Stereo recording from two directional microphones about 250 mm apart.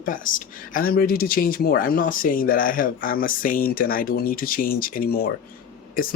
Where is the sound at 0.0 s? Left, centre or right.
Left.